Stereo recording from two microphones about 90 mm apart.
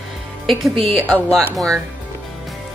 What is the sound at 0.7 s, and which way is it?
Speech, 90° right.